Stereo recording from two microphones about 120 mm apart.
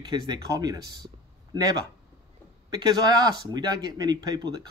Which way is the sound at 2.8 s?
35° right (ahead or behind).